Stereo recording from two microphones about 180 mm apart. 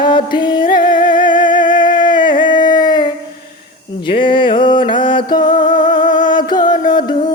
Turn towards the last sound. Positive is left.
turn(degrees=25)  # may be behind; listen again after turning